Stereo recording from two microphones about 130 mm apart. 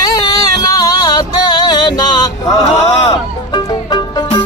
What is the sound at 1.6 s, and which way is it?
Music, 30° left (ahead or behind).